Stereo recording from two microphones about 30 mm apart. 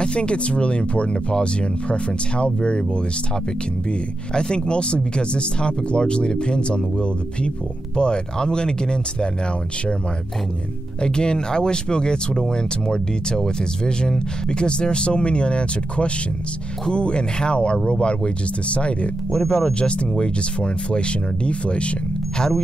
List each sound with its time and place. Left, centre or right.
0.0 s speech: left
4.3 s speech: left
11.0 s speech: left